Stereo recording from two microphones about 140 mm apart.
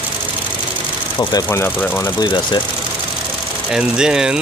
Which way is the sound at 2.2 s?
30° left (ahead or behind).